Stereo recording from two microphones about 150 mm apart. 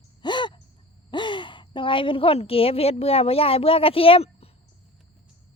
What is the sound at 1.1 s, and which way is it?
Speech, 30° left (ahead or behind).